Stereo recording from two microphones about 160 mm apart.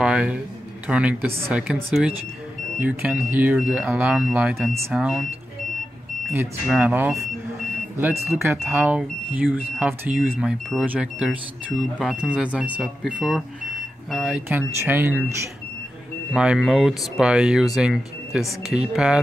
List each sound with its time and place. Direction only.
0.0 s a sound: 5° right (ahead or behind)
0.8 s speech: 5° right (ahead or behind)
6.7 s speech: 10° right (ahead or behind)
14.1 s speech: 5° right (ahead or behind)
14.8 s speech: 15° right (ahead or behind)
16.3 s speech: 5° right (ahead or behind)